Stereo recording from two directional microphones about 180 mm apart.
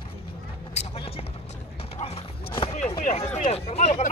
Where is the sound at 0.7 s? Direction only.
35° left (ahead or behind).